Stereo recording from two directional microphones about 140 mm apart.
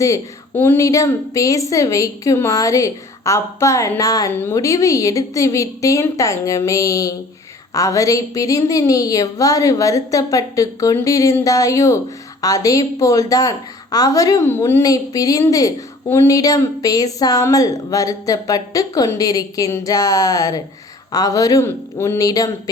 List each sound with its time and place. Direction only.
0.0 s a woman's voice: 20° left (ahead or behind)